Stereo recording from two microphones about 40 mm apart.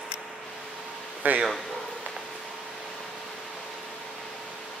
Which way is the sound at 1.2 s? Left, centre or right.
Right.